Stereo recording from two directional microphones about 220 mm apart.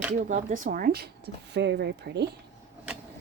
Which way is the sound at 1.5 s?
50° right (ahead or behind).